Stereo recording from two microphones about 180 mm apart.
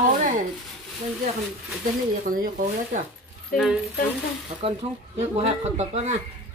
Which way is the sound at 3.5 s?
5° right (ahead or behind).